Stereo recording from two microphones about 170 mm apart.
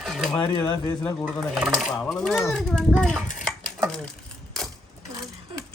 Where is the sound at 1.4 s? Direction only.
5° right (ahead or behind).